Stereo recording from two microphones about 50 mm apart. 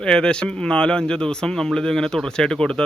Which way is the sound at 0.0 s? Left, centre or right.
Centre.